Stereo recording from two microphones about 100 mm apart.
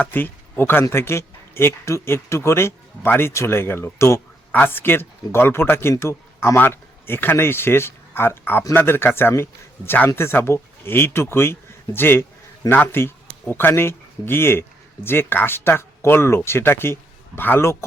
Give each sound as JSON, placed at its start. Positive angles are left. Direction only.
{"t": 0.0, "sound": "speech", "side_deg": 20}